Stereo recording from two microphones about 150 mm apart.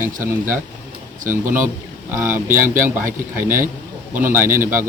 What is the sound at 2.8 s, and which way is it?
Speech, 15° right (ahead or behind).